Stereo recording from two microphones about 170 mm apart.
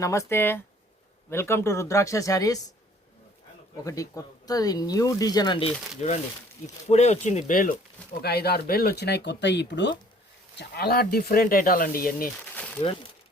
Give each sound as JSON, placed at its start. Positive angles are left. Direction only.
{"t": 0.0, "sound": "speech", "side_deg": 15}
{"t": 3.8, "sound": "speech", "side_deg": 20}
{"t": 6.8, "sound": "speech", "side_deg": 40}
{"t": 8.2, "sound": "speech", "side_deg": 70}
{"t": 10.6, "sound": "speech", "side_deg": 65}